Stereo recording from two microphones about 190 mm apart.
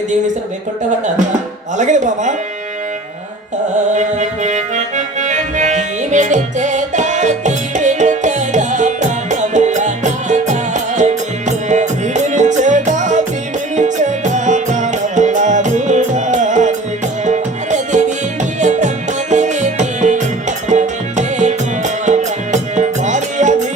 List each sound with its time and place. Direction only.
1.8 s speech: 40° right (ahead or behind)
3.9 s music: 40° right (ahead or behind)